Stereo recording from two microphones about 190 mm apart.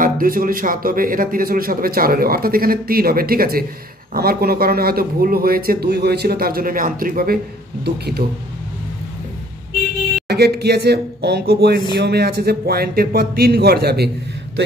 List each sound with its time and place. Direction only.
0.0 s a man's voice: 50° right (ahead or behind)
10.2 s a man's voice: 55° right (ahead or behind)